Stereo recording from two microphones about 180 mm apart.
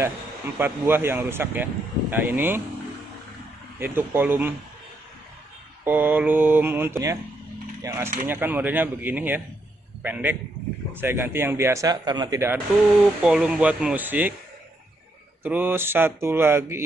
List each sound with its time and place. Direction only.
0.6 s speech: 10° right (ahead or behind)
3.8 s speech: 10° right (ahead or behind)
5.9 s speech: 10° right (ahead or behind)
13.2 s speech: 5° right (ahead or behind)
15.4 s speech: 10° right (ahead or behind)